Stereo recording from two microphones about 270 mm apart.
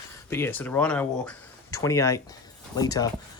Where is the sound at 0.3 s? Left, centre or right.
Centre.